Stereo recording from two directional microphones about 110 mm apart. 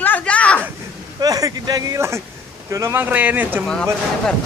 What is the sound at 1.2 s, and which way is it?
Speech, 35° right (ahead or behind).